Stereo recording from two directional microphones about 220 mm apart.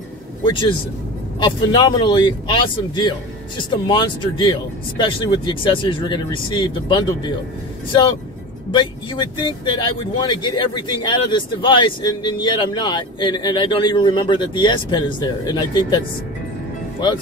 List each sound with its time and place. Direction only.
0.4 s a man's voice: 20° left (ahead or behind)
8.7 s speech: 20° left (ahead or behind)